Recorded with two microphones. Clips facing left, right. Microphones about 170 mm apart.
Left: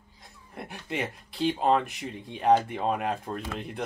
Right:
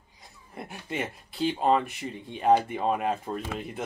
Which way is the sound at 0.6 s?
Centre (ahead or behind).